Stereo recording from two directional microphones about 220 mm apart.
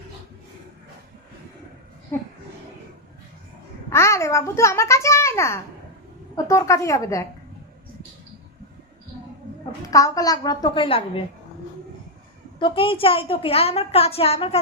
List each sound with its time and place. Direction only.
3.8 s a child's voice: 10° left (ahead or behind)
9.8 s a child's voice: 15° left (ahead or behind)
12.5 s a woman's voice: 25° left (ahead or behind)